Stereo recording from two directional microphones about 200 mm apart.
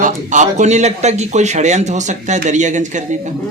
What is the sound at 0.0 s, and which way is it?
Speech, 40° right (ahead or behind).